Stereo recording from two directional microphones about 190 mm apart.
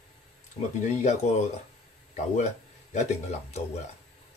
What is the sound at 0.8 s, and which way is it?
Speech, 40° left (ahead or behind).